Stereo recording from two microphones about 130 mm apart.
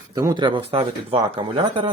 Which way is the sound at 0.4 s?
40° right (ahead or behind).